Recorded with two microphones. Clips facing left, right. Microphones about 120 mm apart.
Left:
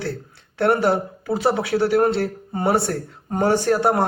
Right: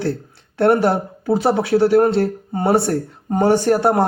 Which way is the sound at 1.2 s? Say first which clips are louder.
Right 6 dB; 40° right (ahead or behind).